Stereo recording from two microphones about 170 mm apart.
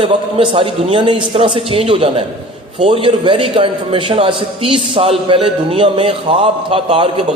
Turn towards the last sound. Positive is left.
turn(degrees=-30)  # may be behind; listen again after turning